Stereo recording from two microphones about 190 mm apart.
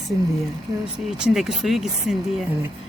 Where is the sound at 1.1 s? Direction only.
5° right (ahead or behind).